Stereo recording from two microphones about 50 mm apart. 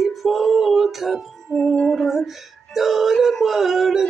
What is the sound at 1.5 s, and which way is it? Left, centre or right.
Music, centre.